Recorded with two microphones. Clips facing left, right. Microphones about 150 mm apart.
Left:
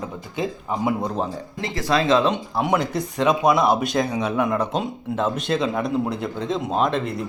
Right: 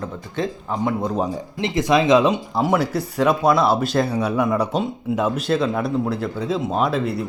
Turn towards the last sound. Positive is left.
turn(degrees=-5)  # may be behind; listen again after turning